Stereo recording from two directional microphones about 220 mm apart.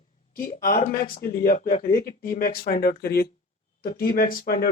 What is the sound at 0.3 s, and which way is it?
Speech, 40° left (ahead or behind).